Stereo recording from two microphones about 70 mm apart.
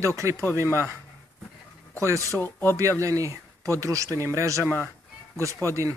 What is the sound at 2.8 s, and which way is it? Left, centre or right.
Speech, right.